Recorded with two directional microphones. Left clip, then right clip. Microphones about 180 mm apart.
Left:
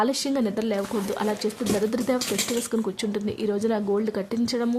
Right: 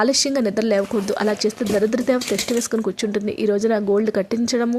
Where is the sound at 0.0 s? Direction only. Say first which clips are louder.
Right 6 dB; 20° right (ahead or behind).